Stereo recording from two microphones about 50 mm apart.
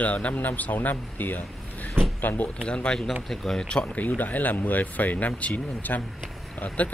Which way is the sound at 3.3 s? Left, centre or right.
Centre.